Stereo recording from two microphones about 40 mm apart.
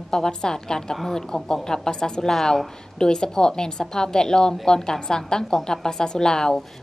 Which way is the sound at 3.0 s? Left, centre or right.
Centre.